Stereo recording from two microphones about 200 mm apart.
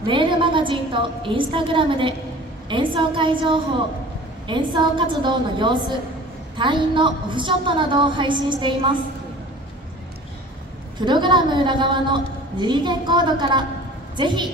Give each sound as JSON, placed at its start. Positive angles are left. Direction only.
{"t": 0.0, "sound": "a woman's voice", "side_deg": -25}
{"t": 11.0, "sound": "a woman's voice", "side_deg": -20}